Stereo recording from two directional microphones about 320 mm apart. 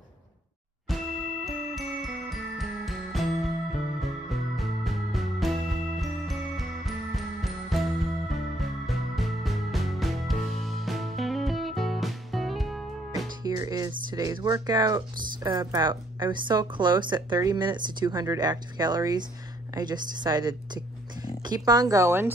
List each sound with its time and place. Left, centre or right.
0.8 s music: centre
13.4 s music: centre
14.1 s speech: centre